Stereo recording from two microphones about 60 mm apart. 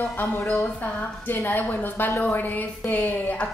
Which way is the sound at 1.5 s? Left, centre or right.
Left.